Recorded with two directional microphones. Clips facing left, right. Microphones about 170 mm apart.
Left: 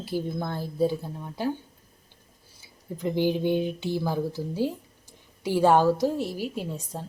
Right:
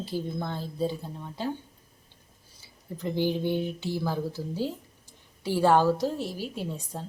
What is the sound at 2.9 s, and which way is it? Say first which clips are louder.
A woman's voice: left 3 dB; 15° left (ahead or behind).